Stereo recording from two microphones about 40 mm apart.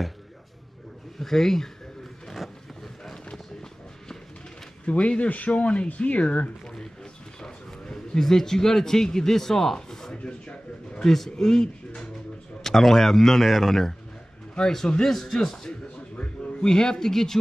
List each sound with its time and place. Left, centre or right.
1.2 s a man's voice: centre
2.2 s vehicle: centre
4.8 s speech: left
7.4 s a sound: centre
8.2 s a man's voice: centre
9.8 s a sound: centre
10.1 s a sound: left
11.1 s a man's voice: centre
15.0 s a man's voice: centre